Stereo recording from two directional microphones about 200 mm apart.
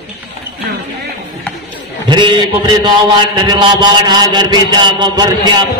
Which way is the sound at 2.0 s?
25° right (ahead or behind).